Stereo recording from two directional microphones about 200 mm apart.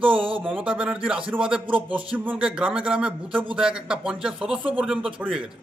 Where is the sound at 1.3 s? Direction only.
5° right (ahead or behind).